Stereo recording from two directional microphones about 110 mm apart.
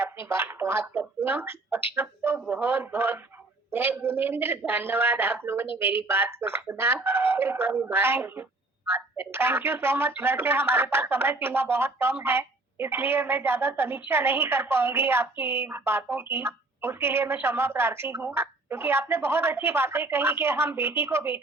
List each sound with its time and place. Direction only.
0.0 s speech: 25° right (ahead or behind)